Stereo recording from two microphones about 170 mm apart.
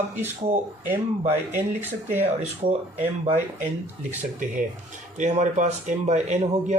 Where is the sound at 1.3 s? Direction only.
10° right (ahead or behind).